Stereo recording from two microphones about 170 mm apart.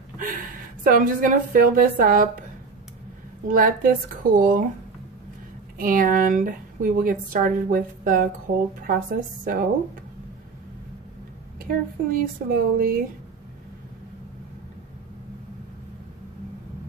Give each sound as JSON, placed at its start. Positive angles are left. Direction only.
{"t": 0.2, "sound": "a woman's voice", "side_deg": -55}
{"t": 3.4, "sound": "a woman's voice", "side_deg": -55}
{"t": 5.8, "sound": "a woman's voice", "side_deg": -55}
{"t": 8.5, "sound": "speech", "side_deg": -40}
{"t": 8.8, "sound": "a woman's voice", "side_deg": -55}
{"t": 11.6, "sound": "a woman's voice", "side_deg": -55}